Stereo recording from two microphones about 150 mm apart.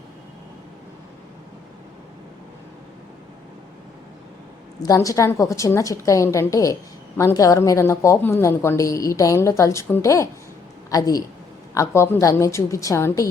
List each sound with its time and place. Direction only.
4.8 s a woman's voice: 25° left (ahead or behind)